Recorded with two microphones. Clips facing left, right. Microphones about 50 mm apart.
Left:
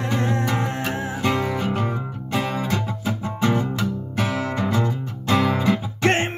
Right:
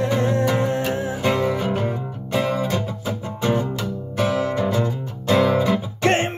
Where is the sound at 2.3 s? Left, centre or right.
Centre.